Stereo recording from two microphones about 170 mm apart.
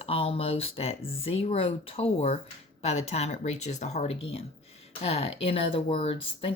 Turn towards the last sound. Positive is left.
turn(degrees=35)  # may be behind; listen again after turning